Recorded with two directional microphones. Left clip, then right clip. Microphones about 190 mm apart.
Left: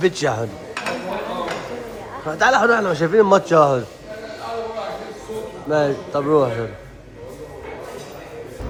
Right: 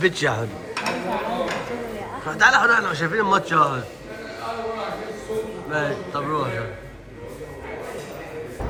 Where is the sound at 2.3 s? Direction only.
25° left (ahead or behind).